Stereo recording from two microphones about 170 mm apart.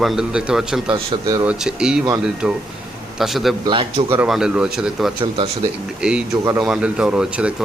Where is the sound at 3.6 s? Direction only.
30° right (ahead or behind).